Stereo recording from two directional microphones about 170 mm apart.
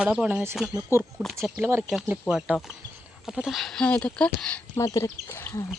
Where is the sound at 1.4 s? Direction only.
5° right (ahead or behind).